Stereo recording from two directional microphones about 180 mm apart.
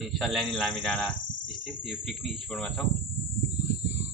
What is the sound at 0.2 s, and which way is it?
Speech, centre (ahead or behind).